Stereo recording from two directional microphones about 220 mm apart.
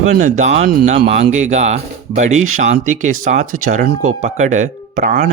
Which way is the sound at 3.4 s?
80° right.